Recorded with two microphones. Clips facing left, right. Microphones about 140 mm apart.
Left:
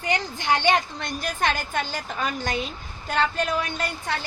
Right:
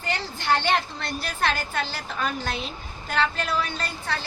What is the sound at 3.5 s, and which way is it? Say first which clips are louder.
Speech: left 1 dB; 20° left (ahead or behind).